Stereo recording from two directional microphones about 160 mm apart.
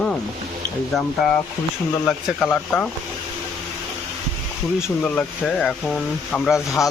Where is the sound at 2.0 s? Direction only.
10° left (ahead or behind).